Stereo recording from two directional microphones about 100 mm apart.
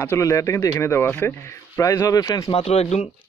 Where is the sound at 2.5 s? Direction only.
90° left.